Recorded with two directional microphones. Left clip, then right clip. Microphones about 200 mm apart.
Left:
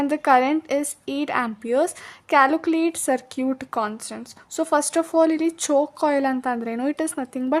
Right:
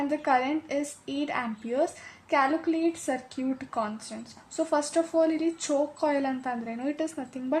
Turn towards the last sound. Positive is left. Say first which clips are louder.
# left 7 dB
turn(degrees=30)  # may be behind; listen again after turning